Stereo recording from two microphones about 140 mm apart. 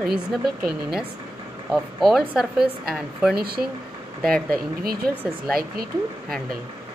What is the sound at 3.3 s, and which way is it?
Speech, 90° right.